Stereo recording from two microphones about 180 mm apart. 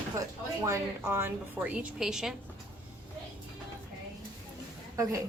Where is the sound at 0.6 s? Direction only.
15° right (ahead or behind).